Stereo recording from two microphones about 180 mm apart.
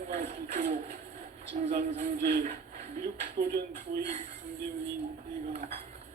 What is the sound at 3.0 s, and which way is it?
Speech, 55° right (ahead or behind).